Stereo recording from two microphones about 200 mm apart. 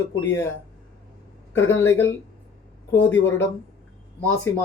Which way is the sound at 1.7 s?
10° left (ahead or behind).